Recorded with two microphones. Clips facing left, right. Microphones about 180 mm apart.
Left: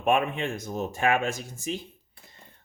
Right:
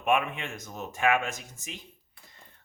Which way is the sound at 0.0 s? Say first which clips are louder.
Left 3 dB; 35° left (ahead or behind).